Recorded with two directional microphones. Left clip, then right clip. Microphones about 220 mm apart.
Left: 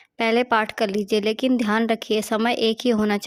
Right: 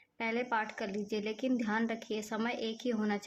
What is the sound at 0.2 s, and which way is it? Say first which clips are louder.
A woman's voice: left 14 dB; 50° left (ahead or behind).